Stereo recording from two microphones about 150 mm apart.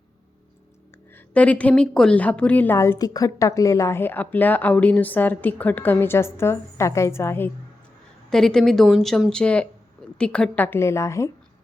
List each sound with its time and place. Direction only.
1.3 s a woman's voice: 10° left (ahead or behind)
8.3 s a woman's voice: 5° left (ahead or behind); by 11.3 s 20° left (ahead or behind)